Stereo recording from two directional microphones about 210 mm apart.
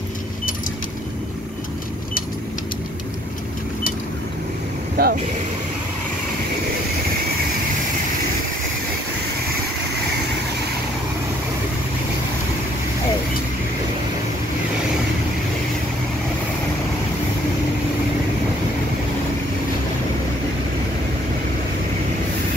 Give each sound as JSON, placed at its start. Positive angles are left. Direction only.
{"t": 5.0, "sound": "speech", "side_deg": -45}